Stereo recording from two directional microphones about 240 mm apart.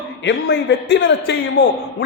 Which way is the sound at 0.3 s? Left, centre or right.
Left.